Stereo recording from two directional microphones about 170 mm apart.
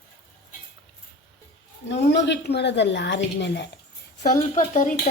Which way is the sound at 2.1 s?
85° left.